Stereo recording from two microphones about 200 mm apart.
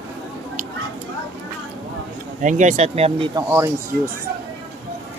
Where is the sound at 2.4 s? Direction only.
40° right (ahead or behind).